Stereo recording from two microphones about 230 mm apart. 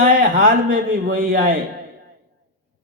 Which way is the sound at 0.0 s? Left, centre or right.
Right.